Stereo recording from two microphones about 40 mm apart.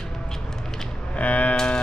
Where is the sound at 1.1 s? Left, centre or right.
Left.